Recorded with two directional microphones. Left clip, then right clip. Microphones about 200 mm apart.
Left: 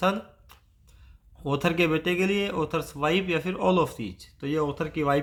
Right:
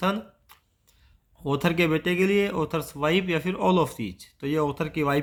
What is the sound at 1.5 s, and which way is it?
Speech, 20° right (ahead or behind).